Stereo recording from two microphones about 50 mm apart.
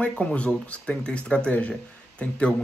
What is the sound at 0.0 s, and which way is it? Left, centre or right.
Speech, left.